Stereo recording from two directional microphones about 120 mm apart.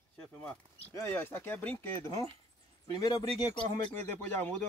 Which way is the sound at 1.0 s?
25° left (ahead or behind).